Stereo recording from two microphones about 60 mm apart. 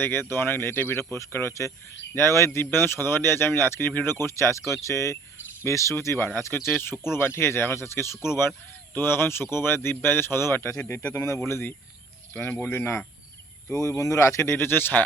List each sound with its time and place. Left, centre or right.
0.0 s speech: left
6.1 s speech: left
12.3 s speech: left
13.7 s speech: left